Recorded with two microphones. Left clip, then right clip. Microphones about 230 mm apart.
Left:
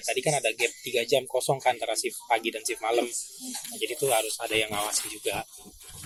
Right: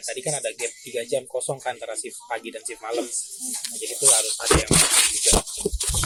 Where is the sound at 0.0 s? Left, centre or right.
Left.